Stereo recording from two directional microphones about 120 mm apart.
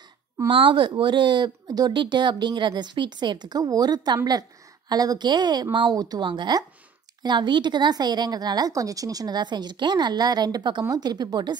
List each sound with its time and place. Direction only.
0.5 s speech: 45° right (ahead or behind)